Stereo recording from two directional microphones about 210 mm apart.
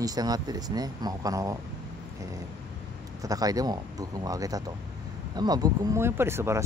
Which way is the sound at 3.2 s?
15° right (ahead or behind).